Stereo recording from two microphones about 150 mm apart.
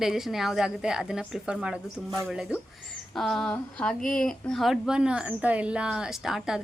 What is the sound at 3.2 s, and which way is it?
Speech, 5° left (ahead or behind).